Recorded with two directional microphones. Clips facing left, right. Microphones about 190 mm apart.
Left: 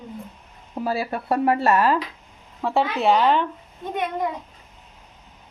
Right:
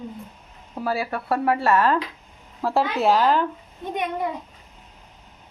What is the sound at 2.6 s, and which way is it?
Speech, centre (ahead or behind).